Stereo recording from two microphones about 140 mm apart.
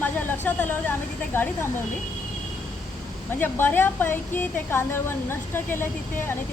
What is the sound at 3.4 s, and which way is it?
A woman's voice, 15° left (ahead or behind).